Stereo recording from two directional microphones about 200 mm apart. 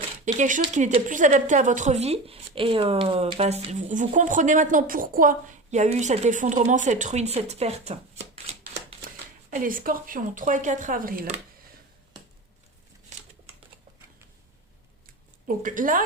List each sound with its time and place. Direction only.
0.3 s speech: 40° right (ahead or behind)
9.6 s speech: 45° right (ahead or behind)
15.4 s speech: 40° right (ahead or behind)